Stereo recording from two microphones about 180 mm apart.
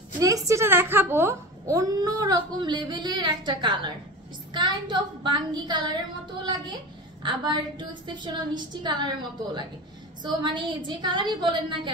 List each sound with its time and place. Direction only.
0.2 s speech: 20° right (ahead or behind)
4.5 s child singing: 25° right (ahead or behind)
6.4 s speech: 25° right (ahead or behind)